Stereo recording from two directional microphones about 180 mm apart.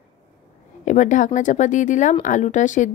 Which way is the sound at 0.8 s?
45° left (ahead or behind).